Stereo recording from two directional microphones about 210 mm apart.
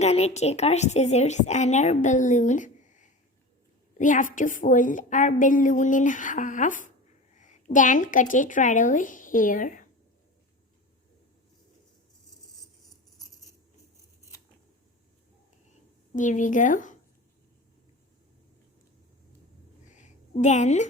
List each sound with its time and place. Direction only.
0.0 s a woman's voice: 30° left (ahead or behind)
16.1 s a woman's voice: 35° left (ahead or behind)
19.9 s a sound: 35° left (ahead or behind)